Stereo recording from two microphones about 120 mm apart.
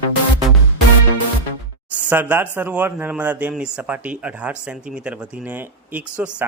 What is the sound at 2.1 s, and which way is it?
Speech, 15° right (ahead or behind).